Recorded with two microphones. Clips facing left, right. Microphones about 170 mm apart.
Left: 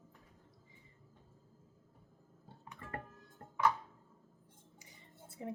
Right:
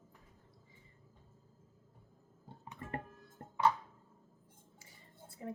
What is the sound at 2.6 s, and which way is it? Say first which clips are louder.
Music: right 3 dB; 25° right (ahead or behind).